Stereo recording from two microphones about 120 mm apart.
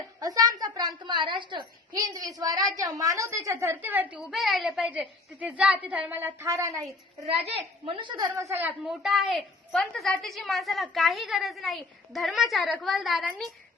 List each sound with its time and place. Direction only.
0.2 s a sound: 30° right (ahead or behind)
2.1 s a woman's voice: 30° right (ahead or behind); by 4.2 s 15° right (ahead or behind)
4.2 s a woman's voice: centre (ahead or behind)
4.8 s a woman's voice: 10° right (ahead or behind)
7.4 s a woman's voice: 55° right (ahead or behind)
8.5 s a woman's voice: 15° right (ahead or behind)
8.9 s a woman's voice: centre (ahead or behind)